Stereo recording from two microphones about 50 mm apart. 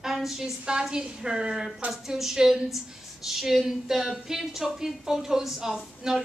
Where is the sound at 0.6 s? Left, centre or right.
Centre.